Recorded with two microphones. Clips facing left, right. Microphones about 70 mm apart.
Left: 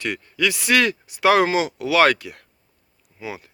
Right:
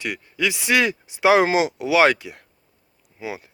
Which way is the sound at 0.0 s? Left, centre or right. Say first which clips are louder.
Left 1 dB; centre.